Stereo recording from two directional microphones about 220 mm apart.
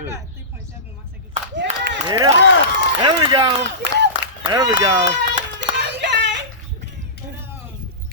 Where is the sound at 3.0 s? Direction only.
25° right (ahead or behind).